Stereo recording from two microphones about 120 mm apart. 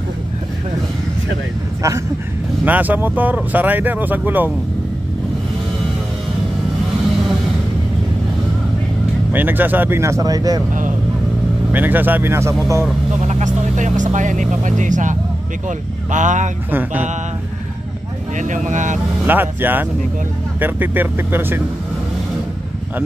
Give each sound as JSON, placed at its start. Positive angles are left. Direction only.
{"t": 2.6, "sound": "speech", "side_deg": -15}
{"t": 9.3, "sound": "speech", "side_deg": -15}
{"t": 11.7, "sound": "speech", "side_deg": -15}
{"t": 13.3, "sound": "speech", "side_deg": -85}
{"t": 16.7, "sound": "speech", "side_deg": -15}
{"t": 18.4, "sound": "speech", "side_deg": -90}
{"t": 19.2, "sound": "speech", "side_deg": -15}